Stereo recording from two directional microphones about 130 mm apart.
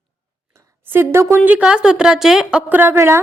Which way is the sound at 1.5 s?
10° right (ahead or behind).